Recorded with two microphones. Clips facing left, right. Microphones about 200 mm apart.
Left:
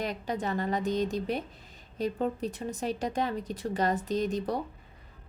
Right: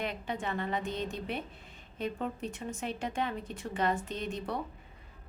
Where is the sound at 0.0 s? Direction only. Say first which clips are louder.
Left 3 dB; 40° left (ahead or behind).